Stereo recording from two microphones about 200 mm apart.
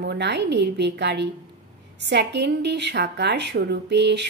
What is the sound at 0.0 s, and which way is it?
A woman's voice, 55° right (ahead or behind).